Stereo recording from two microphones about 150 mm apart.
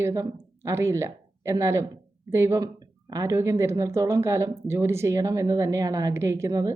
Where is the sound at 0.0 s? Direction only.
20° right (ahead or behind).